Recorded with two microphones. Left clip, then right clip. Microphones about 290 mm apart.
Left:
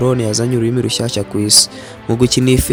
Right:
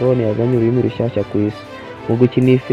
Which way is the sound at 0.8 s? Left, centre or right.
Left.